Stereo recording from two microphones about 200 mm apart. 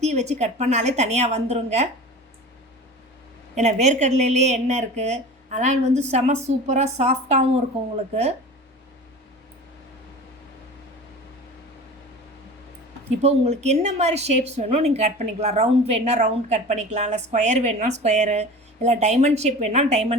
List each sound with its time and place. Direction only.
0.0 s a woman's voice: 35° right (ahead or behind)
3.5 s a woman's voice: 35° right (ahead or behind)
13.2 s a woman's voice: 35° right (ahead or behind)